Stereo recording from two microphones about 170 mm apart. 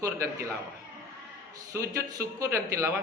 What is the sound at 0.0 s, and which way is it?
Speech, 20° right (ahead or behind).